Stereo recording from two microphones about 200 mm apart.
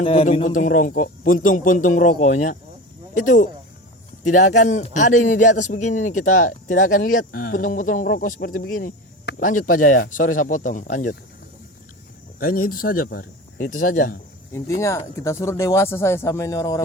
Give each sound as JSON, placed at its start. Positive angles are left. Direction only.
{"t": 0.0, "sound": "a man's voice", "side_deg": 30}
{"t": 12.4, "sound": "speech", "side_deg": 45}
{"t": 14.5, "sound": "speech", "side_deg": 15}